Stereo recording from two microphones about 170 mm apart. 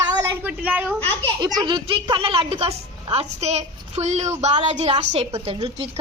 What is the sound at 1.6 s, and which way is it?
A woman's voice, 30° right (ahead or behind).